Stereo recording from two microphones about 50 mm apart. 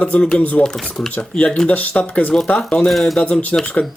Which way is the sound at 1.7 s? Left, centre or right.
Left.